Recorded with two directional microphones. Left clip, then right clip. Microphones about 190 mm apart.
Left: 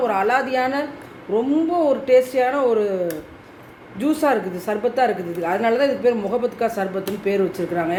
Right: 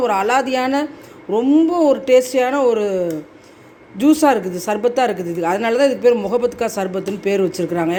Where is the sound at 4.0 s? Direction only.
45° right (ahead or behind).